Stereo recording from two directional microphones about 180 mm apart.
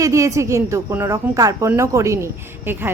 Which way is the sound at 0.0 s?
15° right (ahead or behind).